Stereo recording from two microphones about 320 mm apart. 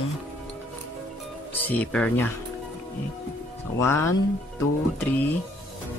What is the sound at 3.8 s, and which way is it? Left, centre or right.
Speech, centre.